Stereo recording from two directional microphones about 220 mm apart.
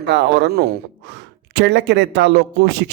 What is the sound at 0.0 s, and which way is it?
Speech, 50° right (ahead or behind).